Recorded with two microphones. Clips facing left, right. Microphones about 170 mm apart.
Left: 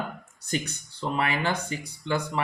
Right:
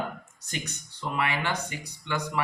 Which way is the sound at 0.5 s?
30° left (ahead or behind).